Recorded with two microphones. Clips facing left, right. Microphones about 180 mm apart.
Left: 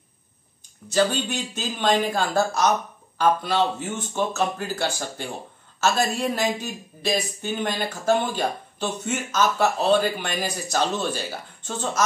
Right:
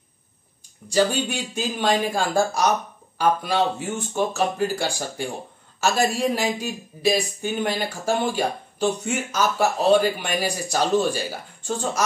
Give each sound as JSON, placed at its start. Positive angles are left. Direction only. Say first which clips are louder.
{"t": 0.8, "sound": "speech", "louder": "right 1 dB", "side_deg": -10}